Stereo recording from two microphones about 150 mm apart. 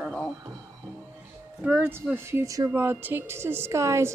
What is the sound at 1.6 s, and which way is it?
A woman's voice, 15° right (ahead or behind).